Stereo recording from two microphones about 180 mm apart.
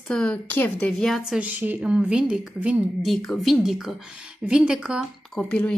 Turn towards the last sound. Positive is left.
turn(degrees=5)  # may be behind; listen again after turning